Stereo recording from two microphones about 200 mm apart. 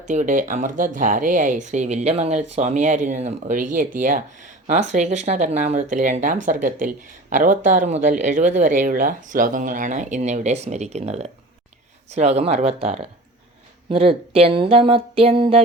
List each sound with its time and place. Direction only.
0.1 s speech: 40° right (ahead or behind)